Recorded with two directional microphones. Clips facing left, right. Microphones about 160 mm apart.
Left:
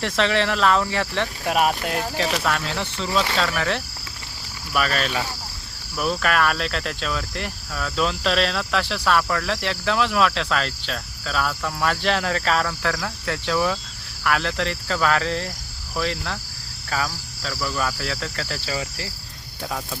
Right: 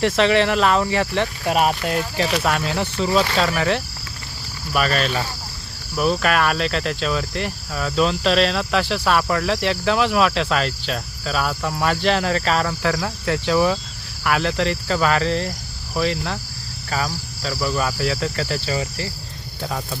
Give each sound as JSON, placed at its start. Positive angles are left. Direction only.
{"t": 0.0, "sound": "cricket", "side_deg": -5}
{"t": 4.7, "sound": "cricket", "side_deg": 0}
{"t": 8.0, "sound": "cricket", "side_deg": 0}